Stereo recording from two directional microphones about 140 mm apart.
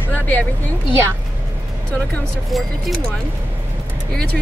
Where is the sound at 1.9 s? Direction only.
5° left (ahead or behind).